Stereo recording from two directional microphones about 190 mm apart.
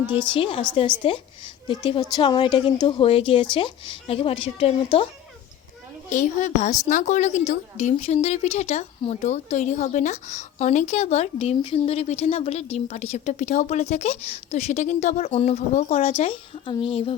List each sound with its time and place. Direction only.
0.1 s speech: 25° left (ahead or behind)
6.1 s a woman's voice: 40° left (ahead or behind)